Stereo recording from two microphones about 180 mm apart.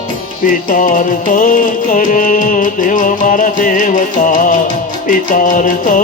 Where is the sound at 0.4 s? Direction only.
45° left (ahead or behind).